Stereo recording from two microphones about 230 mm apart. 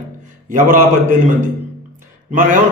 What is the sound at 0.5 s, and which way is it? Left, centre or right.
Speech, right.